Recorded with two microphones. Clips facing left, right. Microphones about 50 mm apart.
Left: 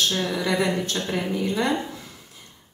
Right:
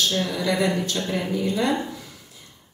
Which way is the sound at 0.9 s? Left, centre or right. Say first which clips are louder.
Even; centre.